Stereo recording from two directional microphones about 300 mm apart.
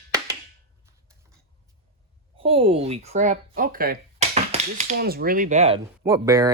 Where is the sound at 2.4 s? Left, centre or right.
Centre.